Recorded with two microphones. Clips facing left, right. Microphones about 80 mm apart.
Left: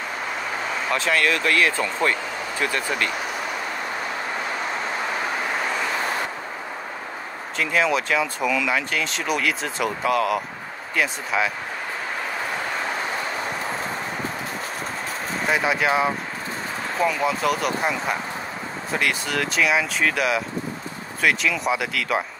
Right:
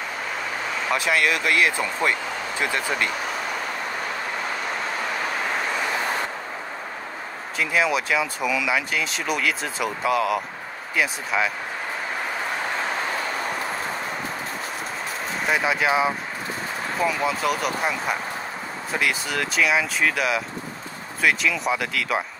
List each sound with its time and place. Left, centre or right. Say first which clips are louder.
0.9 s speech: even; centre
7.5 s speech: left 1 dB; centre
15.4 s speech: left 1 dB; centre